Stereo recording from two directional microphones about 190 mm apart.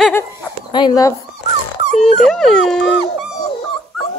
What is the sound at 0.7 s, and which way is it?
Speech, 20° left (ahead or behind).